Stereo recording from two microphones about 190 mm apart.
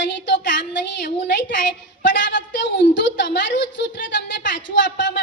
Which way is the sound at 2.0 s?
70° left (ahead or behind).